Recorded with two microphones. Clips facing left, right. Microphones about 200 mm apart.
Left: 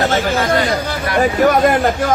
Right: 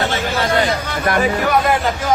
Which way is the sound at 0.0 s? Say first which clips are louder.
Left 3 dB; 45° left (ahead or behind).